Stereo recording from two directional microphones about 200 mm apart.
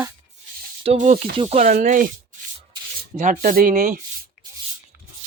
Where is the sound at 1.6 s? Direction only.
40° right (ahead or behind).